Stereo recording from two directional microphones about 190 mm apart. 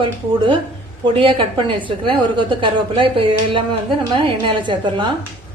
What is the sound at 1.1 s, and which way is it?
A woman's voice, 25° right (ahead or behind).